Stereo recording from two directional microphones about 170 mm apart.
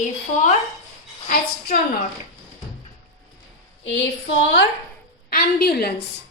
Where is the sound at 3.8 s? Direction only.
90° left.